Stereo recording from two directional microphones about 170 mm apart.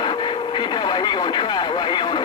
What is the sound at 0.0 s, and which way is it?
Radio, 30° left (ahead or behind).